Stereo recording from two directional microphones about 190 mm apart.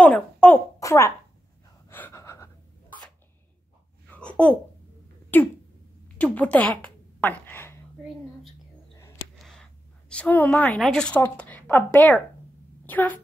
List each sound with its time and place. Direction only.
0.0 s a sound: 10° left (ahead or behind)
1.9 s gasp: 10° left (ahead or behind)
4.1 s babbling: 5° left (ahead or behind)
5.3 s a sound: 10° left (ahead or behind)
6.1 s a woman's voice: 10° left (ahead or behind)
9.4 s a woman's voice: 5° left (ahead or behind)